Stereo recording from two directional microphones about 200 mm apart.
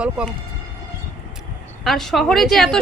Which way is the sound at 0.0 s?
5° right (ahead or behind).